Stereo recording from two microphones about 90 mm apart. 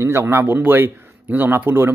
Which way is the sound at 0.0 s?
25° right (ahead or behind).